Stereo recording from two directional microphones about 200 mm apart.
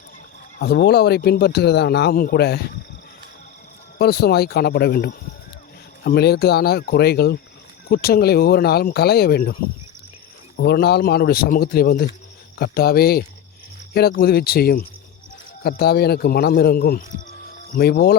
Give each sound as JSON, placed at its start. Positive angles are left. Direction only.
{"t": 0.6, "sound": "speech", "side_deg": 55}
{"t": 3.9, "sound": "speech", "side_deg": 50}
{"t": 10.6, "sound": "speech", "side_deg": 55}